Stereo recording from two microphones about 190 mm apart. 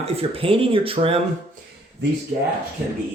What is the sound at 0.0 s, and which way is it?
Speech, 30° right (ahead or behind).